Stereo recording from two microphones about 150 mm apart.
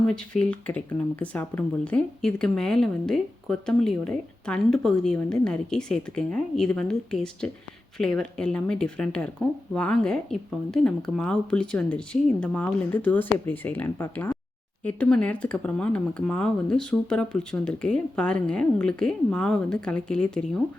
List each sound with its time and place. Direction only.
0.1 s speech: 5° left (ahead or behind)